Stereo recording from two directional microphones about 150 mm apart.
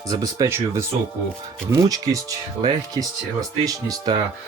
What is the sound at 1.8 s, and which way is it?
Speech, 25° right (ahead or behind).